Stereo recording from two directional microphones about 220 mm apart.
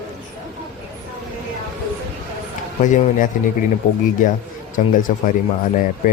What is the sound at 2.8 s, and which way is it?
Speech, 35° left (ahead or behind).